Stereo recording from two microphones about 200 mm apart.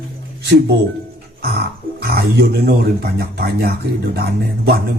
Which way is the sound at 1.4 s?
55° right (ahead or behind).